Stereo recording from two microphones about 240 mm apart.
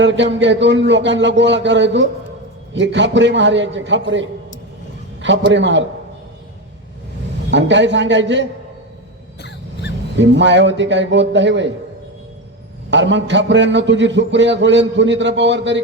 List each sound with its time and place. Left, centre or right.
0.0 s a man's voice: right
7.5 s a man's voice: right
10.2 s a man's voice: right
12.9 s a man's voice: right